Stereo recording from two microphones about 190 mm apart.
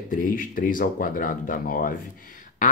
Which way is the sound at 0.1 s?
45° left (ahead or behind).